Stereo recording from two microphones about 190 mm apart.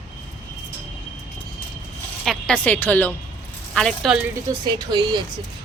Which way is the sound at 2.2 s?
Centre (ahead or behind).